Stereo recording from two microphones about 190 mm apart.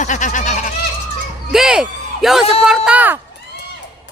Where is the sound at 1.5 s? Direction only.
5° right (ahead or behind).